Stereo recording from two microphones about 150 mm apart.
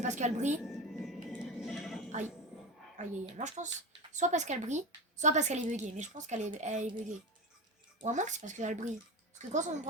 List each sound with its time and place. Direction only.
0.0 s speech: 50° right (ahead or behind)
0.6 s music: centre (ahead or behind)
3.0 s speech: 50° right (ahead or behind)
8.0 s speech: 55° right (ahead or behind)